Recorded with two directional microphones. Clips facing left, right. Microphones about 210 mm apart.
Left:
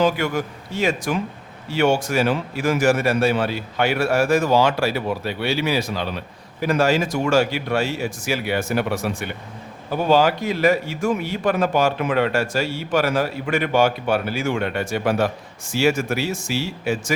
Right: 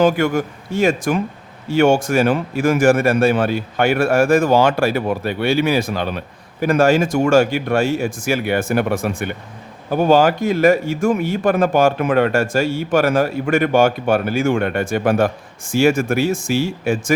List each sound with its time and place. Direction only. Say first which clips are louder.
0.0 s a man's voice: right 5 dB; 50° right (ahead or behind)